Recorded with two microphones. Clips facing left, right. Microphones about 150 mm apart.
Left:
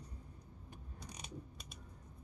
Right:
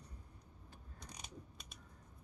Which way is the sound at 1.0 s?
5° left (ahead or behind).